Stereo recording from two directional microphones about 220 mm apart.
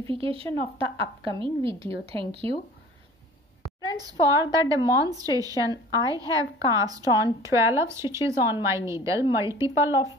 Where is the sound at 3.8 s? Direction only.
15° right (ahead or behind).